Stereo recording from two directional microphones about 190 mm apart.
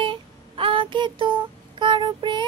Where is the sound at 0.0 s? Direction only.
25° right (ahead or behind).